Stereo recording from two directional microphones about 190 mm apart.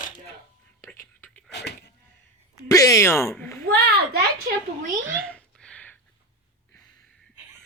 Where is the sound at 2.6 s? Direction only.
15° left (ahead or behind).